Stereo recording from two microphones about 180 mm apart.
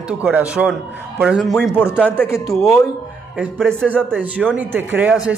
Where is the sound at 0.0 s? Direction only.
5° right (ahead or behind).